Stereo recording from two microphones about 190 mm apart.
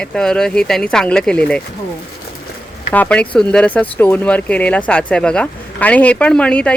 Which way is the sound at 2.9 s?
5° left (ahead or behind).